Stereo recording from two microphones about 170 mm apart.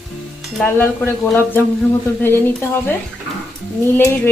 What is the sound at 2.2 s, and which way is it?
Speech, 10° left (ahead or behind).